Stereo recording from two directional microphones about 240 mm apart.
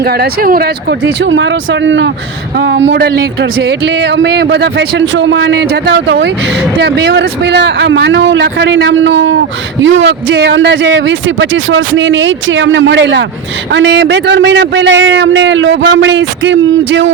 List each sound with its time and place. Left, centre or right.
0.0 s a man's voice: right